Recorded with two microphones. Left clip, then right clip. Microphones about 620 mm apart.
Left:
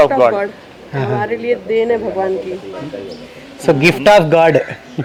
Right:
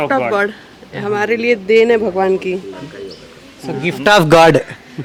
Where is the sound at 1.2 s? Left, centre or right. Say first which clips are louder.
Right 3 dB; right.